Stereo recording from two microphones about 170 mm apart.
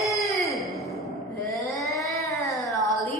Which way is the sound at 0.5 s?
Centre (ahead or behind).